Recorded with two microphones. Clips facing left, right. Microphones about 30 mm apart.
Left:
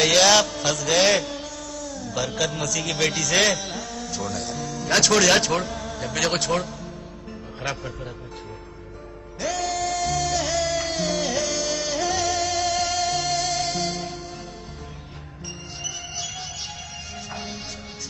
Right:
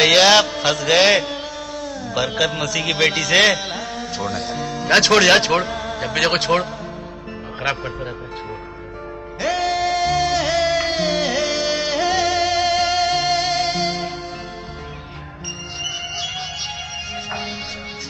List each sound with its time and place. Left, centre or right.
0.0 s mantra: right
7.6 s speech: right
9.4 s music: right
15.8 s music: right